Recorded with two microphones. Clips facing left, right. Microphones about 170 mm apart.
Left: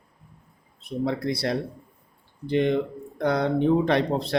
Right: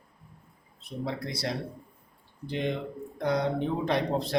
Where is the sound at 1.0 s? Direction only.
60° left (ahead or behind).